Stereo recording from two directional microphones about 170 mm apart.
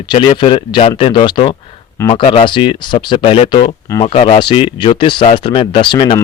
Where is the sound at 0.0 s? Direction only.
30° left (ahead or behind).